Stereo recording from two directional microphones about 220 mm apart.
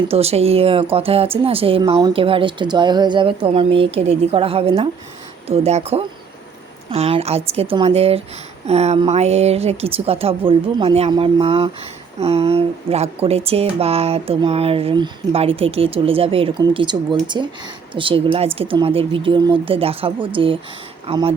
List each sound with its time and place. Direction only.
0.1 s speech: 30° right (ahead or behind)